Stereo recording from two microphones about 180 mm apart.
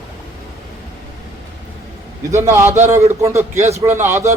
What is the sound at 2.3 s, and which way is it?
Speech, 15° right (ahead or behind).